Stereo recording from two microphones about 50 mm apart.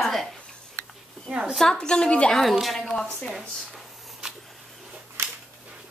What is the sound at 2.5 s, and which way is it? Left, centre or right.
Speech, centre.